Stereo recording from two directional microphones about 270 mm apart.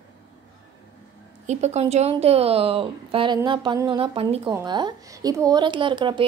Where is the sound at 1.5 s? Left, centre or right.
Right.